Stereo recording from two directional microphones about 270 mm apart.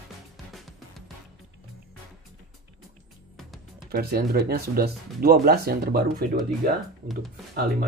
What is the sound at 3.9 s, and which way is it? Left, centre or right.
Speech, right.